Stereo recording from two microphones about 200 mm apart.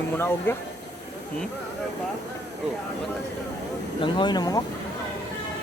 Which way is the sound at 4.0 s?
20° left (ahead or behind).